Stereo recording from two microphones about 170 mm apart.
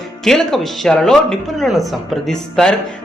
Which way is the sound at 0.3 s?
Centre (ahead or behind).